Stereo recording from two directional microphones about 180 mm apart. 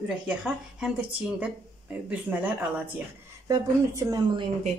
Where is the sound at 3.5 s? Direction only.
20° right (ahead or behind).